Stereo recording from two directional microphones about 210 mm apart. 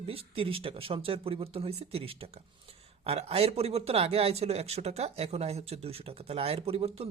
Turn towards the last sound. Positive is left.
turn(degrees=-30)  # may be behind; listen again after turning